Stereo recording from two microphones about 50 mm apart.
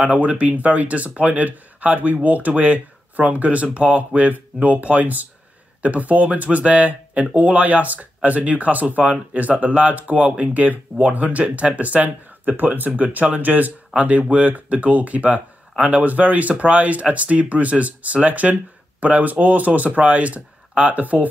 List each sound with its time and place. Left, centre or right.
0.0 s speech: right